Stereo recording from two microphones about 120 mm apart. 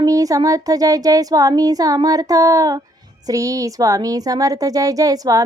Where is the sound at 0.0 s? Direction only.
30° right (ahead or behind).